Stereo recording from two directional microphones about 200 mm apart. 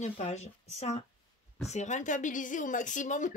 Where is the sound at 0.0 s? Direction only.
35° left (ahead or behind).